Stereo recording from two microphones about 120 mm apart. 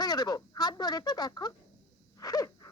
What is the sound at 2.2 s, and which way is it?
Sneeze, 30° left (ahead or behind).